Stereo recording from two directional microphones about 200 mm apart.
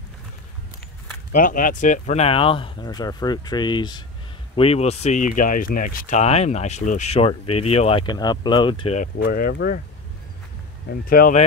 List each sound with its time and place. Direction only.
1.3 s speech: 40° left (ahead or behind); by 9.0 s 25° left (ahead or behind)
9.0 s speech: 50° left (ahead or behind)
11.1 s speech: 45° left (ahead or behind)